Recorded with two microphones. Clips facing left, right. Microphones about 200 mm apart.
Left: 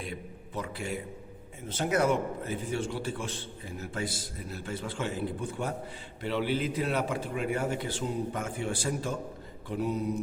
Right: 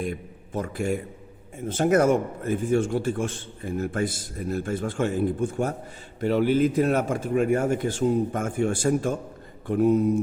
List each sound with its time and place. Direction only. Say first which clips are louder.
0.0 s a man's voice: right 8 dB; 50° right (ahead or behind)